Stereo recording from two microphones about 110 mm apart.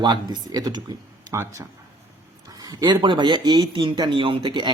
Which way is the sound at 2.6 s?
40° right (ahead or behind).